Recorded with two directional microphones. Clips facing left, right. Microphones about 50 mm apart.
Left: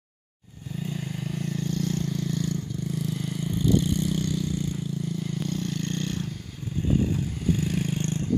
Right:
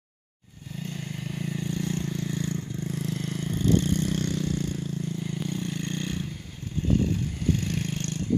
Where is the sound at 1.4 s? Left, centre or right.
Centre.